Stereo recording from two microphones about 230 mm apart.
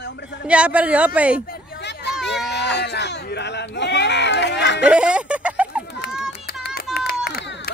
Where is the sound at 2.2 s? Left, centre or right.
Left.